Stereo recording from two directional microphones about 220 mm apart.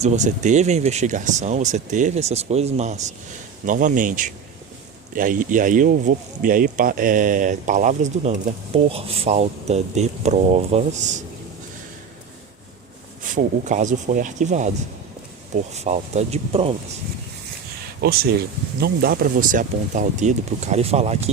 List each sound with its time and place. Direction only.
0.0 s speech: 35° right (ahead or behind)
13.2 s speech: 35° right (ahead or behind)
18.0 s speech: 45° right (ahead or behind); by 21.2 s 30° right (ahead or behind)